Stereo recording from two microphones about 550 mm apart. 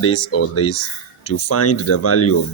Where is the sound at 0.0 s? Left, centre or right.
Left.